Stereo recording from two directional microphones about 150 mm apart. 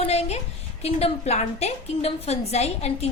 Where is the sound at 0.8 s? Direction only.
45° left (ahead or behind).